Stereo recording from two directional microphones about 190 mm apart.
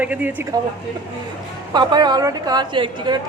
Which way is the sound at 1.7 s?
20° right (ahead or behind).